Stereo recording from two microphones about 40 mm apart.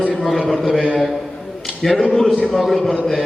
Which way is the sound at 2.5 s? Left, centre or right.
Centre.